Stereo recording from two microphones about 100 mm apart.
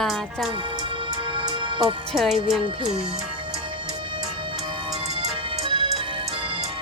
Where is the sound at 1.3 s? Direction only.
55° right (ahead or behind).